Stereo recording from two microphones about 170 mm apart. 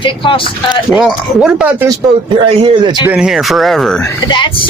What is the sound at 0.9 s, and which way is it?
Speech, centre (ahead or behind).